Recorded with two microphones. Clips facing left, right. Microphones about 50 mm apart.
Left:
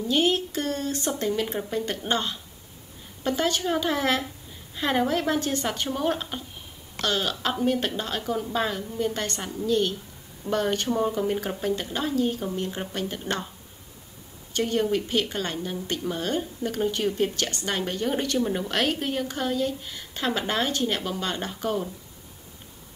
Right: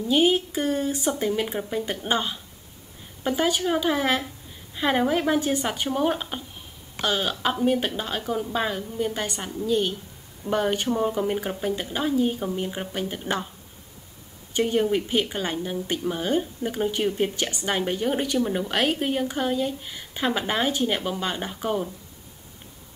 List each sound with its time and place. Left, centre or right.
0.1 s a woman's voice: centre
14.5 s a woman's voice: centre